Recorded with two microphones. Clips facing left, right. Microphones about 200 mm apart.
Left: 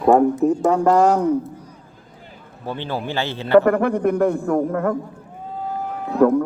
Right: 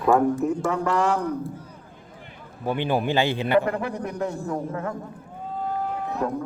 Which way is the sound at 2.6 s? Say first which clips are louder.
Right 3 dB; 15° right (ahead or behind).